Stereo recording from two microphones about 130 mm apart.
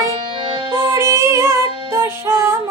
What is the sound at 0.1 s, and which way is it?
Music, 40° right (ahead or behind).